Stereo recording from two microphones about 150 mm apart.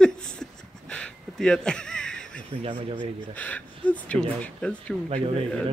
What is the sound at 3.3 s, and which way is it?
Speech, 10° left (ahead or behind).